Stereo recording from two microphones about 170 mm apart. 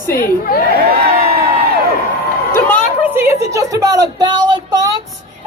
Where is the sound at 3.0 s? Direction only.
15° right (ahead or behind).